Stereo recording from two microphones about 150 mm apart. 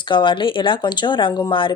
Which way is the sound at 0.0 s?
35° left (ahead or behind).